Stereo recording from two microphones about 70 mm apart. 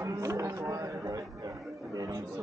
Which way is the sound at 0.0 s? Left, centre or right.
Right.